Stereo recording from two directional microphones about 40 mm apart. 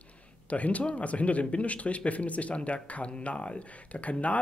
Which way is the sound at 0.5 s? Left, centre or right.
Left.